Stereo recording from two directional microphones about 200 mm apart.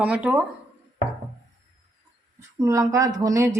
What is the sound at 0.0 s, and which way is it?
Speech, 5° right (ahead or behind).